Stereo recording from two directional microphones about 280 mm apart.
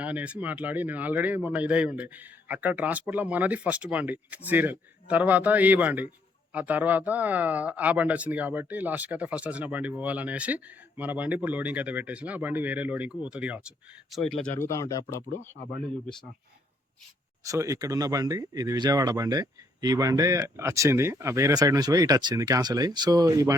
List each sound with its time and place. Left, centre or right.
0.0 s speech: centre
17.4 s speech: centre